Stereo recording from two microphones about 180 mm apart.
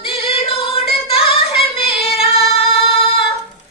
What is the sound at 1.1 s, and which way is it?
Female singing, 30° left (ahead or behind).